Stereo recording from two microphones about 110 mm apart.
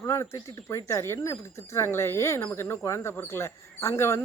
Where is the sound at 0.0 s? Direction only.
25° left (ahead or behind).